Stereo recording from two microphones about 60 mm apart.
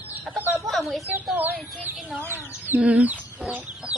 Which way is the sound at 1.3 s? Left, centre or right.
Right.